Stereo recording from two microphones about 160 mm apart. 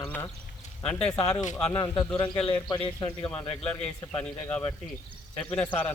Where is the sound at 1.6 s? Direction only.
15° left (ahead or behind).